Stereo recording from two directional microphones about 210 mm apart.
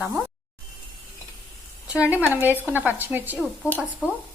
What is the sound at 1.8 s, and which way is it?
Speech, 5° right (ahead or behind).